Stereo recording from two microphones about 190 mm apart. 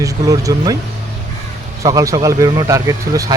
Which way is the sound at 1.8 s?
15° right (ahead or behind).